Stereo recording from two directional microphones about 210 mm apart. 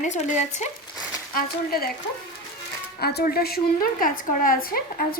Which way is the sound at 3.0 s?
50° left (ahead or behind).